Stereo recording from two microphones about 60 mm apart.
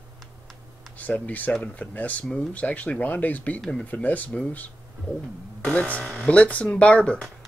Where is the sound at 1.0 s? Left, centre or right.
Left.